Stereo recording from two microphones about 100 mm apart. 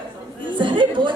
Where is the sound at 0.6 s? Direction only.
55° right (ahead or behind).